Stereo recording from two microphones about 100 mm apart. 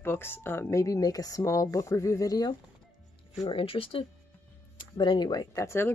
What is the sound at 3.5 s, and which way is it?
Speech, 65° left (ahead or behind).